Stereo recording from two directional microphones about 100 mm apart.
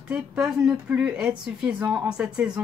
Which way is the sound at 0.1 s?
5° right (ahead or behind).